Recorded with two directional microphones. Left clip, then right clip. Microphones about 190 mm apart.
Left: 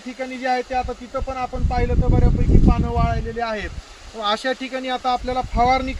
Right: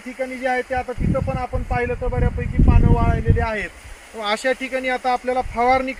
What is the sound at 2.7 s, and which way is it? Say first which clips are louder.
Speech: right 3 dB; 15° right (ahead or behind).